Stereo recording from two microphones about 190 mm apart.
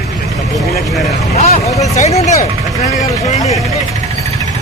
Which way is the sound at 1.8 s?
35° left (ahead or behind).